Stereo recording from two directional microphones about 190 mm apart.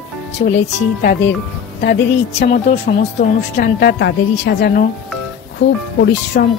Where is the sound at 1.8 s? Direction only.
55° left (ahead or behind).